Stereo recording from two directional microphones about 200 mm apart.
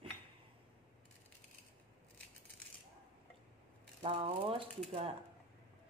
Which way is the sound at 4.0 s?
30° right (ahead or behind).